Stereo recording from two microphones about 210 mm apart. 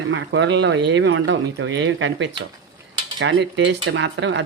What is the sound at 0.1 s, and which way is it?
Speech, 60° right (ahead or behind).